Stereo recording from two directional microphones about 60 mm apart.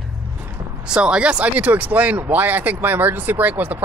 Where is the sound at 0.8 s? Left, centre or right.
Centre.